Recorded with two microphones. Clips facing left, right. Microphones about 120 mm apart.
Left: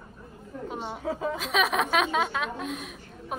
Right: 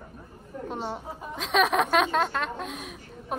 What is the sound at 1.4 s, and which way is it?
A woman's voice, centre (ahead or behind).